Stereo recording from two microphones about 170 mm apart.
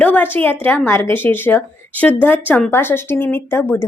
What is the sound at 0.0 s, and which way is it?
A woman's voice, 10° left (ahead or behind).